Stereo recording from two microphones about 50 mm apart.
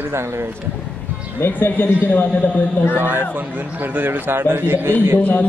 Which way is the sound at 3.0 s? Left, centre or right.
Right.